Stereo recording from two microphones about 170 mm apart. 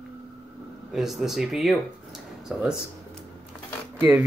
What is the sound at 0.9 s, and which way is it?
Speech, centre (ahead or behind).